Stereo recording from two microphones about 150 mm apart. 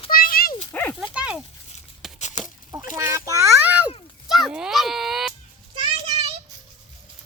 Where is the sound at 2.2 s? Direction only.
50° left (ahead or behind).